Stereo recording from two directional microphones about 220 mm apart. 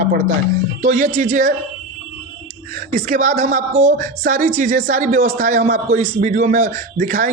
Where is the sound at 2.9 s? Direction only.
35° right (ahead or behind).